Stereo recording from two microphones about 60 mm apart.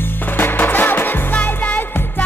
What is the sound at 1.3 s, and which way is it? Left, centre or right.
Music, left.